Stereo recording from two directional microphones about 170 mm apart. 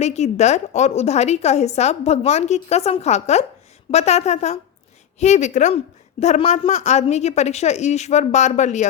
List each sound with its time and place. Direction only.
0.0 s a woman's voice: 40° left (ahead or behind)